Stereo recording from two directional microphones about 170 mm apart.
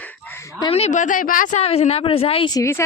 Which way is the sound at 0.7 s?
40° left (ahead or behind).